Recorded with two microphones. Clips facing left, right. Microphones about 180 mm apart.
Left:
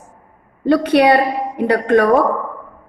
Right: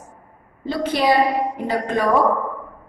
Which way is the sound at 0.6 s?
65° left (ahead or behind).